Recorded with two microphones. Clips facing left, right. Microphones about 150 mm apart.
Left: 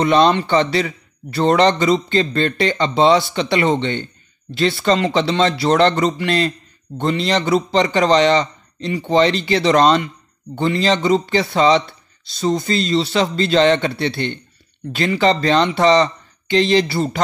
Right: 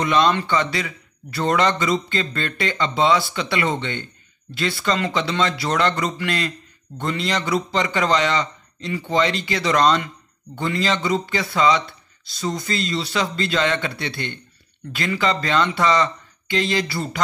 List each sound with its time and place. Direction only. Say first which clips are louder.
0.0 s a man's voice: left 5 dB; 35° left (ahead or behind)